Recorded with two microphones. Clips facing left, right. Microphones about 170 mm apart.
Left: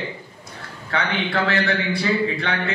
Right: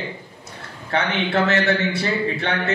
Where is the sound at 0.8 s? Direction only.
25° right (ahead or behind).